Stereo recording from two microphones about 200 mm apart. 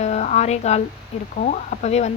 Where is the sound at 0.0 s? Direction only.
35° left (ahead or behind).